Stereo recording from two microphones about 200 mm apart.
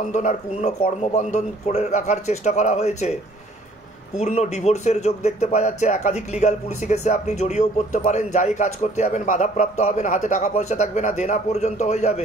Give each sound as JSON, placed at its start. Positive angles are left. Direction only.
{"t": 0.1, "sound": "speech", "side_deg": 35}
{"t": 4.2, "sound": "speech", "side_deg": 35}